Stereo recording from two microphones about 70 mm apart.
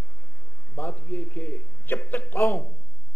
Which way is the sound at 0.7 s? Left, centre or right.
Left.